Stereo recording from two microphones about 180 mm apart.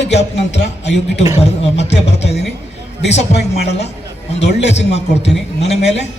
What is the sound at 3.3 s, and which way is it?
A man's voice, 70° left (ahead or behind).